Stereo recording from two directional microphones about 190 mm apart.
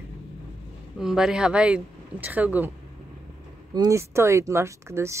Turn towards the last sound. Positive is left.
turn(degrees=-15)  # may be behind; listen again after turning